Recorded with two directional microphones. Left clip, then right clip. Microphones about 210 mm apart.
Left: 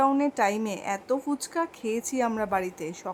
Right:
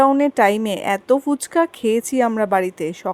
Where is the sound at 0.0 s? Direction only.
25° right (ahead or behind).